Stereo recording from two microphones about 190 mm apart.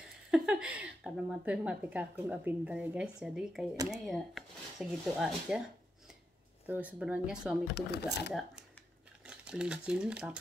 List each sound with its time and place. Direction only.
0.3 s a woman's voice: 5° right (ahead or behind)
6.7 s a woman's voice: 10° right (ahead or behind)
7.7 s speech: 60° left (ahead or behind)
9.2 s speech: 5° right (ahead or behind)